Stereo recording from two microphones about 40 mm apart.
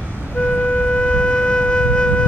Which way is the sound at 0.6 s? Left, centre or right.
Left.